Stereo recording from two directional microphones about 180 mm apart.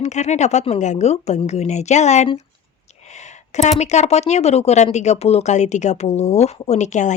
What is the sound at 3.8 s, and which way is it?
Speech, 40° left (ahead or behind).